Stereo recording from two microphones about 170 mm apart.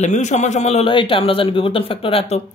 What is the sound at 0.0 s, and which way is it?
A woman's voice, 45° left (ahead or behind).